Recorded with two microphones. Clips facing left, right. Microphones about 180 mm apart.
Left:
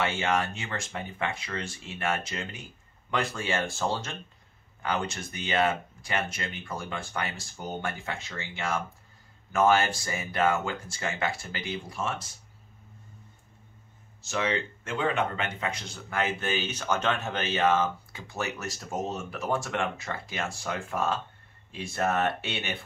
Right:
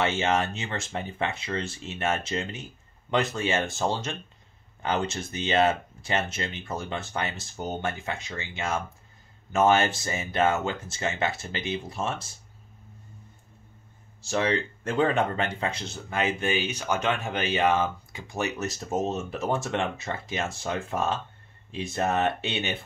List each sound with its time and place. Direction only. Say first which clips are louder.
0.0 s speech: right 3 dB; 25° right (ahead or behind)
14.2 s speech: right 3 dB; 35° right (ahead or behind)